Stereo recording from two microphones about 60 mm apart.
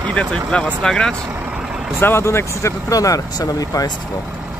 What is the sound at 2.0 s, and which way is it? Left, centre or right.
Speech, left.